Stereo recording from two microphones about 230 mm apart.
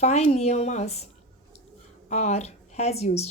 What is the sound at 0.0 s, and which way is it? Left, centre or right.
A woman's voice, left.